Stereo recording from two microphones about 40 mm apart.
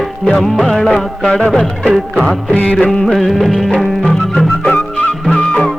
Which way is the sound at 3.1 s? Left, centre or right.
Centre.